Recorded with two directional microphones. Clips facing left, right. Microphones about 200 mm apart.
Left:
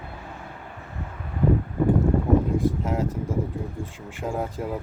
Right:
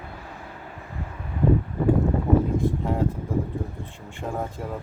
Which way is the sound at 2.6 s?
90° left.